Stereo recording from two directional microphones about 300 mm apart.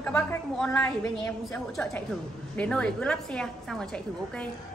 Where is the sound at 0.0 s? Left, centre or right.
Centre.